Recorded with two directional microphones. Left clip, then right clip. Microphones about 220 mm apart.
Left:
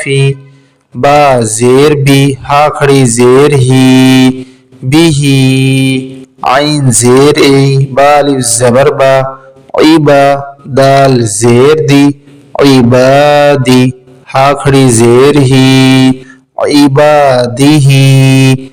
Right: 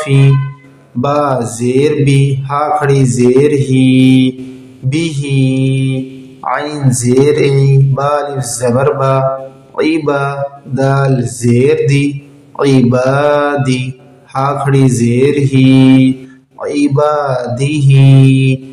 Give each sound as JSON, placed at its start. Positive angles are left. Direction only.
{"t": 0.0, "sound": "mantra", "side_deg": 40}
{"t": 1.0, "sound": "speech", "side_deg": 45}
{"t": 10.8, "sound": "mantra", "side_deg": 40}
{"t": 14.3, "sound": "a man's voice", "side_deg": 45}
{"t": 16.6, "sound": "a sound", "side_deg": 45}
{"t": 17.0, "sound": "speech", "side_deg": 45}